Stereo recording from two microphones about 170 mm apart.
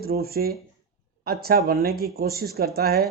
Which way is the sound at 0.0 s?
65° right (ahead or behind).